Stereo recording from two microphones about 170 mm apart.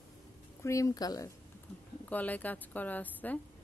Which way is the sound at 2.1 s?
10° left (ahead or behind).